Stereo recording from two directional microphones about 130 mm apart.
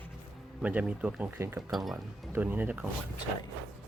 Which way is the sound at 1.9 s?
15° right (ahead or behind).